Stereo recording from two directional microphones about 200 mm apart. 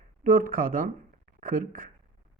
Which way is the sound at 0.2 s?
45° right (ahead or behind).